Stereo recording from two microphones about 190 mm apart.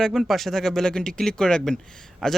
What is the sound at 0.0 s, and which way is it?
A man's voice, centre (ahead or behind).